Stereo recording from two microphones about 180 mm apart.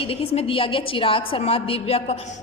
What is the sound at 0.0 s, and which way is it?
A woman's voice, 30° left (ahead or behind).